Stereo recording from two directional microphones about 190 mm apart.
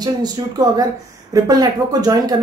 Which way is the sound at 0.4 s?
25° right (ahead or behind).